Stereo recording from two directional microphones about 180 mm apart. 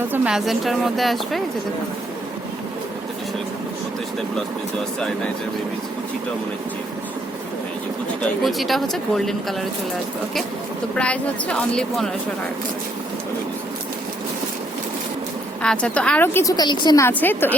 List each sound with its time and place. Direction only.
0.1 s speech: 5° right (ahead or behind)
8.2 s speech: centre (ahead or behind)
10.9 s speech: 5° left (ahead or behind)
15.6 s a woman's voice: 5° left (ahead or behind)